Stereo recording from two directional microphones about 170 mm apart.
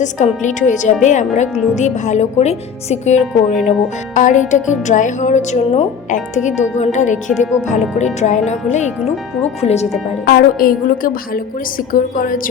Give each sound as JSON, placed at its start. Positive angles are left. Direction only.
{"t": 0.0, "sound": "speech", "side_deg": 45}
{"t": 10.2, "sound": "a woman's voice", "side_deg": 55}